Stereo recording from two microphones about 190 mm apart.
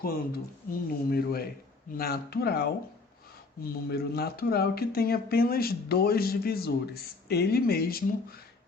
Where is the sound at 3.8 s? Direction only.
55° left (ahead or behind).